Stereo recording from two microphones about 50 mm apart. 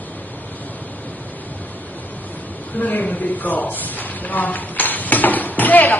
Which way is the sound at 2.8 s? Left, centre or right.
Left.